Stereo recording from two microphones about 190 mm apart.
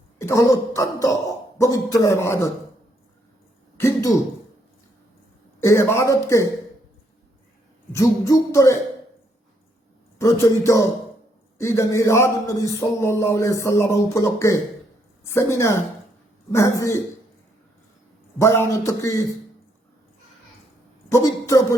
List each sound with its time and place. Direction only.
0.2 s speech: 15° left (ahead or behind)
3.8 s throat clearing: 15° left (ahead or behind)
5.5 s speech: 15° left (ahead or behind)
7.9 s speech: 15° left (ahead or behind)
10.2 s speech: 15° left (ahead or behind)
18.3 s speech: 15° left (ahead or behind)
21.1 s a sound: 15° left (ahead or behind)